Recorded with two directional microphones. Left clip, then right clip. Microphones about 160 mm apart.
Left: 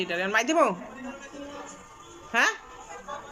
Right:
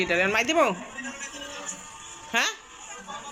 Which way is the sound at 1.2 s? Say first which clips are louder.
Right 3 dB; 30° left (ahead or behind).